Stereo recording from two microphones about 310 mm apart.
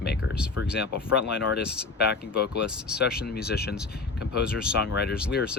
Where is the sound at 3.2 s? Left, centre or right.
Left.